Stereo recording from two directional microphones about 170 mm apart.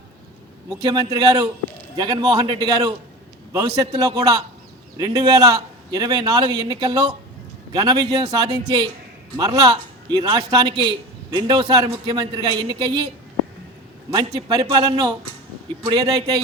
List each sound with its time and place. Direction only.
0.8 s a man's voice: 25° right (ahead or behind)
14.1 s a man's voice: 25° right (ahead or behind)